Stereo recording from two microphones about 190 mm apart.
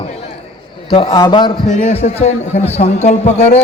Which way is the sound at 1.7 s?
35° left (ahead or behind).